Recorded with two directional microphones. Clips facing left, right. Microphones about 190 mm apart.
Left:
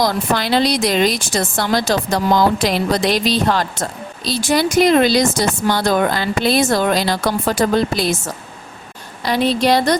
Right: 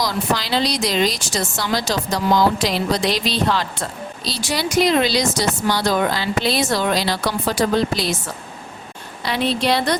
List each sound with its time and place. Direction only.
0.0 s a woman's voice: 55° left (ahead or behind)